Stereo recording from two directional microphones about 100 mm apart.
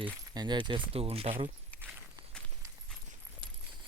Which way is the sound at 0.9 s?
80° right.